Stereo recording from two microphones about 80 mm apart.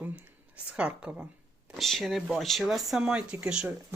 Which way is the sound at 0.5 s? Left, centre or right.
Centre.